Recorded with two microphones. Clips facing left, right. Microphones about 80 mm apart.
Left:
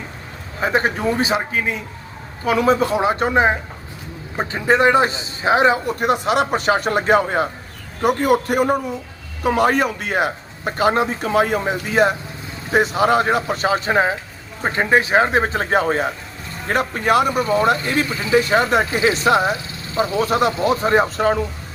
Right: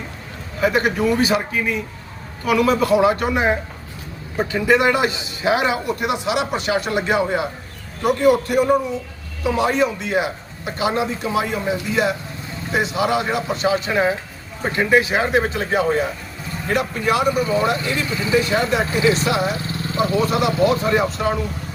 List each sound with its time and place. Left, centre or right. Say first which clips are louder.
0.6 s a man's voice: right 1 dB; left